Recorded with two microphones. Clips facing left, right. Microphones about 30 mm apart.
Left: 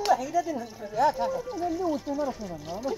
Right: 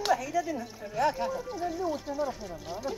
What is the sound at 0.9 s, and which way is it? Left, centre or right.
Speech, centre.